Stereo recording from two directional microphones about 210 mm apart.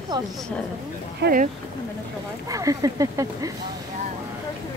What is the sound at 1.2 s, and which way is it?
Speech, 45° right (ahead or behind).